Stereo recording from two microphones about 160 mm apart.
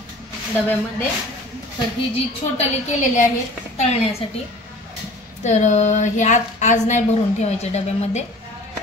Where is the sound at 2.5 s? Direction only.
50° left (ahead or behind).